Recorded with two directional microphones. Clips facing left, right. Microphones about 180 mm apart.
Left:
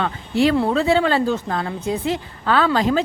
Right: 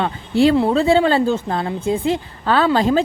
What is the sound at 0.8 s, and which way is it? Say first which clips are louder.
A woman's voice: right 3 dB; 30° right (ahead or behind).